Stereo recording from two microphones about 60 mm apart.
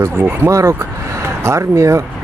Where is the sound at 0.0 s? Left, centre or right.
Right.